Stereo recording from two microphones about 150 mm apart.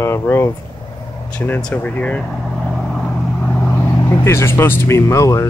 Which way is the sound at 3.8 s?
20° left (ahead or behind).